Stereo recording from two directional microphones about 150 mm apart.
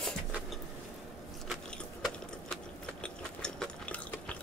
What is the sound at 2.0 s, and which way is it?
Sewing machine, 5° left (ahead or behind).